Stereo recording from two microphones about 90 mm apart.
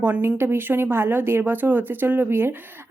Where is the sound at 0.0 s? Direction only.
25° right (ahead or behind).